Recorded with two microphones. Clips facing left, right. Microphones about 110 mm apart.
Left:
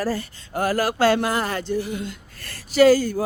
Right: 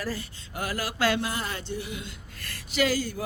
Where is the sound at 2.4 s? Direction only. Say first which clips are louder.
Left 11 dB; 35° left (ahead or behind).